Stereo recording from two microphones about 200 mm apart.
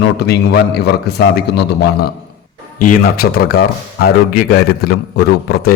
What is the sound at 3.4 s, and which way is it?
Speech, 50° left (ahead or behind).